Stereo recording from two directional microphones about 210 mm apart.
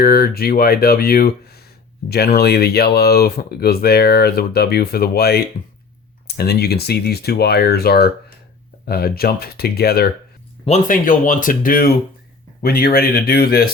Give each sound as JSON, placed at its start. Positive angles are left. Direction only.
{"t": 0.0, "sound": "speech", "side_deg": 45}